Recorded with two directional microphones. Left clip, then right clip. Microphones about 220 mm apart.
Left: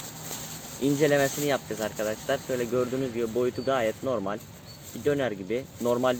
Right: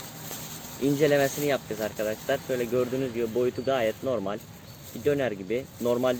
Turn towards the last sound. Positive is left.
turn(degrees=-5)  # may be behind; listen again after turning